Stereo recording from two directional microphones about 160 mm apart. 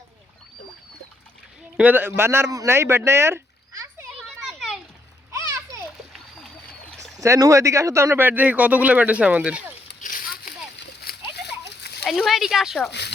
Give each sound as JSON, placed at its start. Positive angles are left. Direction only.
{"t": 1.7, "sound": "speech", "side_deg": -10}
{"t": 4.2, "sound": "children playing", "side_deg": 0}
{"t": 7.2, "sound": "speech", "side_deg": -20}
{"t": 10.0, "sound": "splash", "side_deg": 60}
{"t": 11.8, "sound": "a sound", "side_deg": 90}
{"t": 12.0, "sound": "speech", "side_deg": 0}
{"t": 12.9, "sound": "speech", "side_deg": 90}